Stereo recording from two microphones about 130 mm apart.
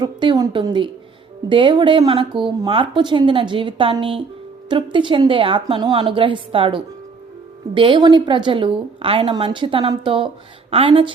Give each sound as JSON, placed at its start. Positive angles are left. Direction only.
{"t": 0.0, "sound": "a woman's voice", "side_deg": -35}